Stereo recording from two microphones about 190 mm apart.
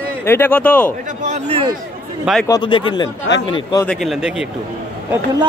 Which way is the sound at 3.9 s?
Centre (ahead or behind).